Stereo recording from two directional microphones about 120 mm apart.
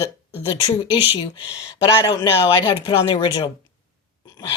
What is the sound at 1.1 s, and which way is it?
Speech, 45° left (ahead or behind).